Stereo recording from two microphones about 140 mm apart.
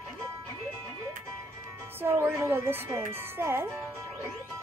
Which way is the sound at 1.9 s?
15° right (ahead or behind).